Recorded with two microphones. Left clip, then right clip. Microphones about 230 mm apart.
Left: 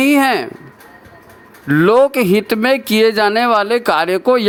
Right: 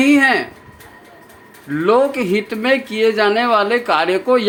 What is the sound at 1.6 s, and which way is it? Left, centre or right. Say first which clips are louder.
A man's voice: left 4 dB; left.